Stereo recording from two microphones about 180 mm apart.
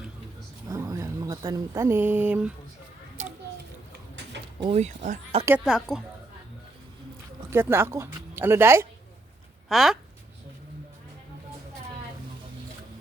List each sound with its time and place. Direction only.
0.7 s speech: 20° right (ahead or behind)
4.6 s speech: 30° right (ahead or behind)
5.6 s a woman's voice: centre (ahead or behind)
7.5 s speech: 15° right (ahead or behind)
9.6 s a woman's voice: centre (ahead or behind)